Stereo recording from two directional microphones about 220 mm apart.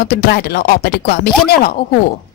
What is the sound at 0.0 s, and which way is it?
Speech, 45° left (ahead or behind).